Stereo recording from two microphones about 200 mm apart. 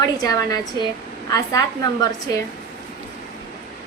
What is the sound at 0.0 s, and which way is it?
A woman's voice, 20° left (ahead or behind).